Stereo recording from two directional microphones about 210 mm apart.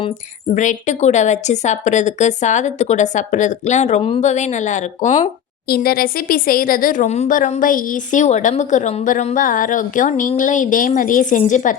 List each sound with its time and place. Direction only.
0.5 s speech: 35° left (ahead or behind)
5.6 s speech: 45° left (ahead or behind)